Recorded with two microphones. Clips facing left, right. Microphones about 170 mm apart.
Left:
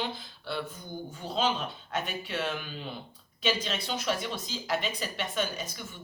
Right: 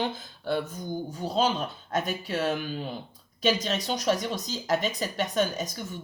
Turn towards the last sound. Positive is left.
turn(degrees=-40)  # may be behind; listen again after turning